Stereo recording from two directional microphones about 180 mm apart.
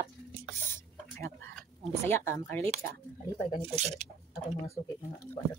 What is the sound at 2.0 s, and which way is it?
Speech, 15° left (ahead or behind).